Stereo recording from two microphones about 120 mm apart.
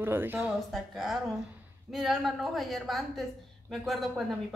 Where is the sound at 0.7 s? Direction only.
Centre (ahead or behind).